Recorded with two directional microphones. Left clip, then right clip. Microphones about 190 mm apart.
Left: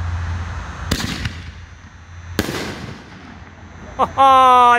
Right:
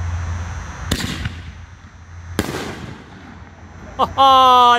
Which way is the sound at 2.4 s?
Centre (ahead or behind).